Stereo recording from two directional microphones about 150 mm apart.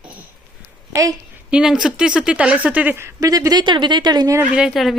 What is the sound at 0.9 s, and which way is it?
Speech, 20° right (ahead or behind).